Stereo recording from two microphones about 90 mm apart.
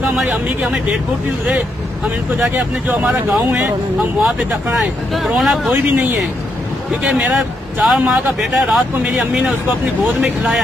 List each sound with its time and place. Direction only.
0.1 s speech: 15° right (ahead or behind)
2.0 s speech: 15° right (ahead or behind)
4.7 s speech: centre (ahead or behind)
5.7 s speech: 15° right (ahead or behind)